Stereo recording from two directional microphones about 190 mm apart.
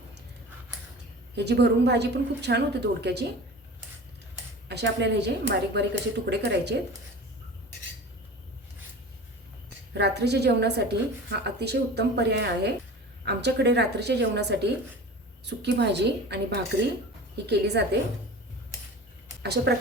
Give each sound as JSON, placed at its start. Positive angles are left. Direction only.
{"t": 1.4, "sound": "a woman's voice", "side_deg": -60}
{"t": 4.7, "sound": "a woman's voice", "side_deg": -65}
{"t": 9.9, "sound": "a woman's voice", "side_deg": -60}
{"t": 19.4, "sound": "speech", "side_deg": -60}